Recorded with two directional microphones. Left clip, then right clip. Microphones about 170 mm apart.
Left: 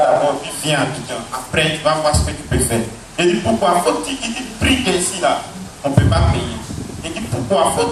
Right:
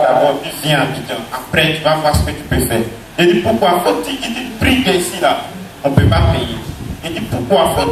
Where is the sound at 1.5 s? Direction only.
30° right (ahead or behind).